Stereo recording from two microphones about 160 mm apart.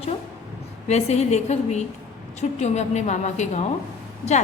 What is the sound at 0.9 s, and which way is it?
A woman's voice, 40° left (ahead or behind).